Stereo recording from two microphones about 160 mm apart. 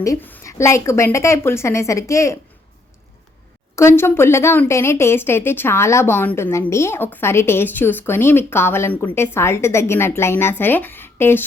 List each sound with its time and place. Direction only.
0.0 s a woman's voice: 15° left (ahead or behind)
3.8 s a woman's voice: 15° left (ahead or behind)